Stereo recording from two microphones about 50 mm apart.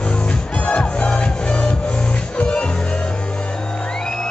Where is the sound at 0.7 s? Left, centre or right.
Left.